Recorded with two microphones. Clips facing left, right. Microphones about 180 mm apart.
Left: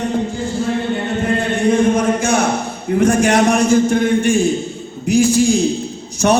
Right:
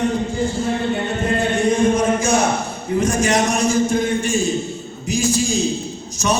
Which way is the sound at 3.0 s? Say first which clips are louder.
Left 5 dB; 60° left (ahead or behind).